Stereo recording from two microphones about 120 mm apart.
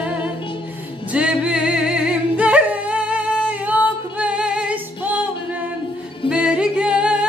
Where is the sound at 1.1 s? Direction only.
10° right (ahead or behind).